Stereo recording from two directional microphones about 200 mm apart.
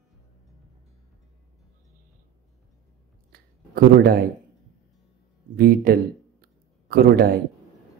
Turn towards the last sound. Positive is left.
turn(degrees=-50)  # may be behind; listen again after turning